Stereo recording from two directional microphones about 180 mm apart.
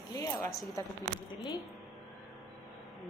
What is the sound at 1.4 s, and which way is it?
Speech, 20° left (ahead or behind).